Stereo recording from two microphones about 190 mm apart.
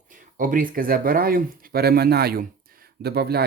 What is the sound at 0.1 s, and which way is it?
Speech, 45° right (ahead or behind).